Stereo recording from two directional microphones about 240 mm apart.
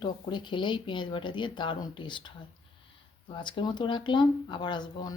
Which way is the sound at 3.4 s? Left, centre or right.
Centre.